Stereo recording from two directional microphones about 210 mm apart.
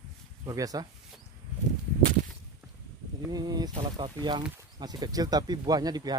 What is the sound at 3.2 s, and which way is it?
Speech, 20° right (ahead or behind).